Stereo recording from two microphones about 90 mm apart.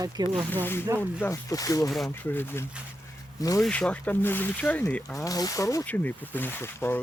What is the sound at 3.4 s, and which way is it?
Speech, 40° left (ahead or behind).